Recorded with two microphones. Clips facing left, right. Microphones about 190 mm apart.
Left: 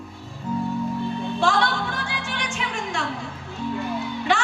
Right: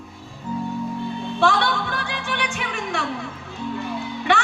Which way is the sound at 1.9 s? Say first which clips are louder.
Right 3 dB; 60° right (ahead or behind).